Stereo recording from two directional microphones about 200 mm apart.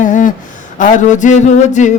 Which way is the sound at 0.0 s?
40° left (ahead or behind).